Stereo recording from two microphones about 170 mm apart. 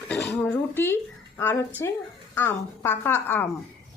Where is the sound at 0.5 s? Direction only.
15° left (ahead or behind).